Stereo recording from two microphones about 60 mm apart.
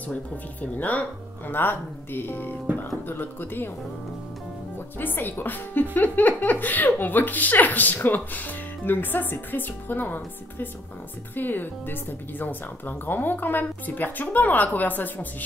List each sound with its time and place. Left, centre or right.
0.1 s speech: left
4.7 s speech: left